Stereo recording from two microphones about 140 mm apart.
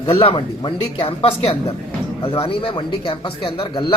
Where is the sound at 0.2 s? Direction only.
40° left (ahead or behind).